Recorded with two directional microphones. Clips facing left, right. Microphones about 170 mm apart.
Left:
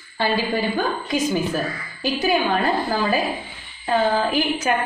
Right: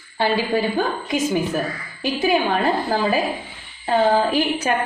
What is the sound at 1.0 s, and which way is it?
A woman's voice, 20° right (ahead or behind).